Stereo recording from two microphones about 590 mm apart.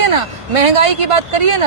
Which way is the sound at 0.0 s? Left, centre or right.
Right.